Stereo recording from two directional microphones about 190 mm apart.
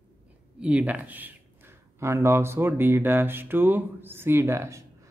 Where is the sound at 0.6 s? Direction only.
5° right (ahead or behind).